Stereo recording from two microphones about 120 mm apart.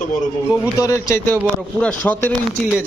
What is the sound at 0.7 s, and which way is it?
Speech, 25° left (ahead or behind).